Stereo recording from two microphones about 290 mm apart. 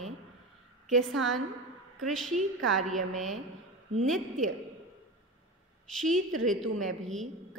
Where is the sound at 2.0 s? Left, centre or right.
Centre.